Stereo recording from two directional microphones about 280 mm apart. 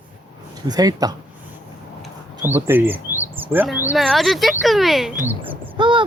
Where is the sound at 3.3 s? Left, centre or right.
Centre.